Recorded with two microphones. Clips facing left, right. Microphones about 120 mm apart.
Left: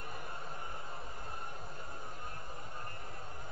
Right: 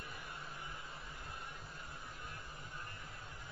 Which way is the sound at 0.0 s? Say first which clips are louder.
Left 4 dB; 45° left (ahead or behind).